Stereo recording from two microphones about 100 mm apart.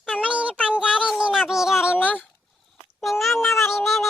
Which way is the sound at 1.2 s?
5° right (ahead or behind).